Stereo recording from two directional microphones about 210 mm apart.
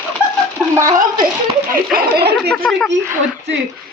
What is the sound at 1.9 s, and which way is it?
Speech, 50° right (ahead or behind).